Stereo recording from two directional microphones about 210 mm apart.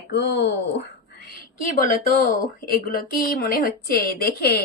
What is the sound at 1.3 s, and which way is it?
A woman's voice, 40° left (ahead or behind).